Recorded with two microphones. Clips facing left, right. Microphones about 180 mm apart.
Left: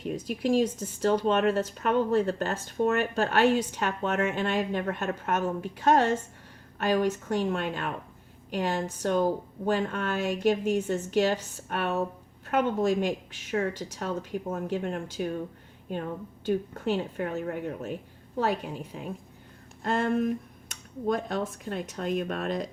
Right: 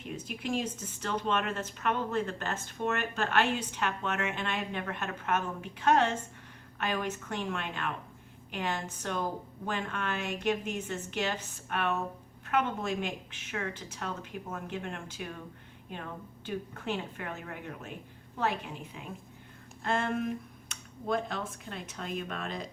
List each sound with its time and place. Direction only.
0.0 s speech: 35° left (ahead or behind)
16.5 s speech: 40° left (ahead or behind)